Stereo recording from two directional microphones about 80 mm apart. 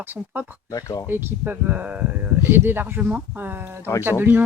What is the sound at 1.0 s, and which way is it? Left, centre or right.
Speech, right.